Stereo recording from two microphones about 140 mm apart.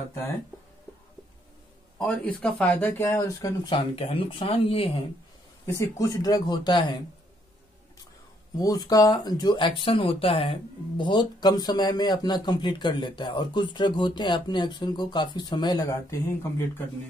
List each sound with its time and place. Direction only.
2.0 s a man's voice: 10° left (ahead or behind); by 3.7 s 25° left (ahead or behind)
3.7 s speech: 45° left (ahead or behind)
5.8 s speech: 25° left (ahead or behind)
8.5 s speech: 25° left (ahead or behind)